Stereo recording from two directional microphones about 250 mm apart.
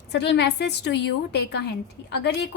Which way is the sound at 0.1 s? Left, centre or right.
Left.